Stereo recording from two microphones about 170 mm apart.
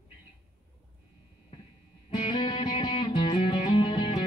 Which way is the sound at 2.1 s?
30° left (ahead or behind).